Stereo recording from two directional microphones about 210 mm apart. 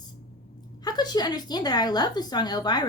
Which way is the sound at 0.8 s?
20° left (ahead or behind).